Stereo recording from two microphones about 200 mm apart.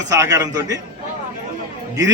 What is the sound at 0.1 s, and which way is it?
Speech, 15° right (ahead or behind).